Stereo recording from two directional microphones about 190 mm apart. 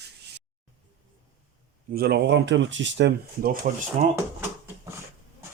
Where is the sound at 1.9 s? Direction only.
55° right (ahead or behind).